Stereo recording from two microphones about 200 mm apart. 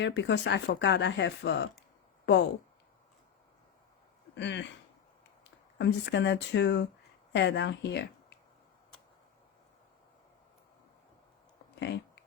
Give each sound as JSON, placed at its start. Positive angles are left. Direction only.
{"t": 0.0, "sound": "speech", "side_deg": 60}
{"t": 4.4, "sound": "speech", "side_deg": 60}
{"t": 11.8, "sound": "a sound", "side_deg": 60}